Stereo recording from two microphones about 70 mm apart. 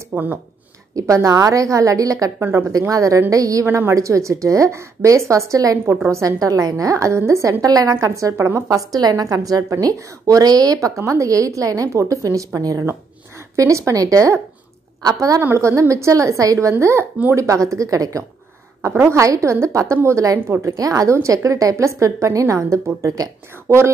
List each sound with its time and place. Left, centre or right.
0.1 s speech: right
0.9 s a woman's voice: right
7.6 s a woman's voice: right
7.9 s a woman's voice: right
11.0 s a woman's voice: right
15.5 s a woman's voice: right
18.8 s a woman's voice: right
20.7 s a woman's voice: right
23.7 s a woman's voice: right